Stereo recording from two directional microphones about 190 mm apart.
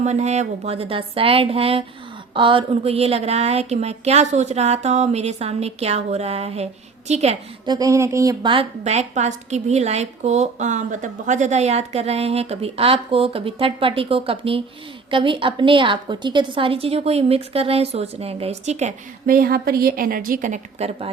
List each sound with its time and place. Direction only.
0.0 s speech: 35° right (ahead or behind)
7.7 s speech: 20° right (ahead or behind); by 18.9 s 35° right (ahead or behind)
19.2 s a woman's voice: 50° right (ahead or behind); by 21.1 s 35° right (ahead or behind)